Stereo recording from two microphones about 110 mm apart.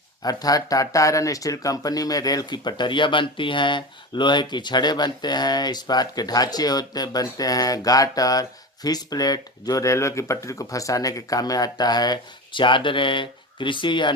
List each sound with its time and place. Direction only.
0.2 s speech: 35° left (ahead or behind)